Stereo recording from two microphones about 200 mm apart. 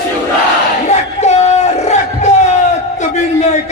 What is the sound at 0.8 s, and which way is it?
Crowd, 35° left (ahead or behind).